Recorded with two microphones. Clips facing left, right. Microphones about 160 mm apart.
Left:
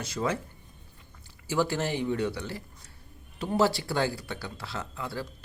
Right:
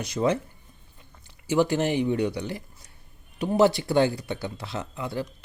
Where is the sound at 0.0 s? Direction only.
20° right (ahead or behind).